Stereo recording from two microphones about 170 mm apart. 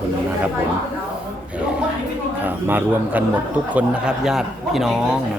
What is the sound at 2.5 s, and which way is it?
A man's voice, 10° right (ahead or behind).